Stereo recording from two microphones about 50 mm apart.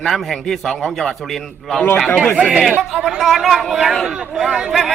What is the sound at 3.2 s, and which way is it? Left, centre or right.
Speech, centre.